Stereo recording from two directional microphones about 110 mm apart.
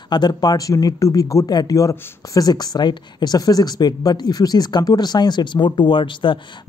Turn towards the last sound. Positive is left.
turn(degrees=50)  # may be behind; listen again after turning